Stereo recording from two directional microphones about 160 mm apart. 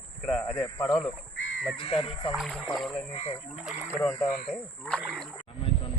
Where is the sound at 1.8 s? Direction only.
35° left (ahead or behind).